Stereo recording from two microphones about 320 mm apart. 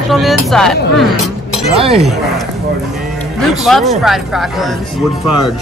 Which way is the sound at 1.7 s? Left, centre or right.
Centre.